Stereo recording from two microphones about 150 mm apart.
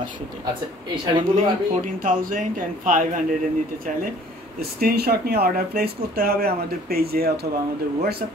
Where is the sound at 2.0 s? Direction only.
65° right (ahead or behind).